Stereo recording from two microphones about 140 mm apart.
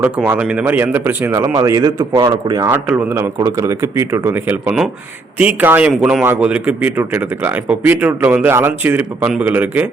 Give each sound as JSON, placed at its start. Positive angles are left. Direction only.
{"t": 0.0, "sound": "speech", "side_deg": -10}
{"t": 2.6, "sound": "speech", "side_deg": -15}